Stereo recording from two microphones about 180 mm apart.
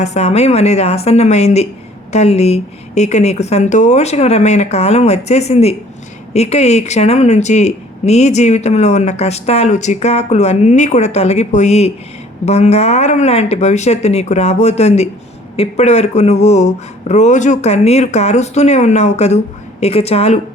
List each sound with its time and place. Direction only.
0.0 s speech: 40° left (ahead or behind)